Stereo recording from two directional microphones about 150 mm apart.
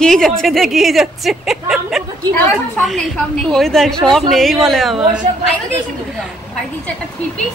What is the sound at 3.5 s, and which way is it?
A woman's voice, 5° left (ahead or behind).